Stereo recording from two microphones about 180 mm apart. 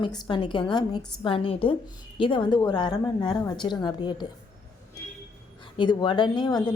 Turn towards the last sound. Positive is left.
turn(degrees=25)  # may be behind; listen again after turning